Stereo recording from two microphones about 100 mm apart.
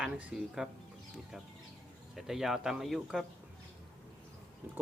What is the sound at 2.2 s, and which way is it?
Speech, 5° right (ahead or behind).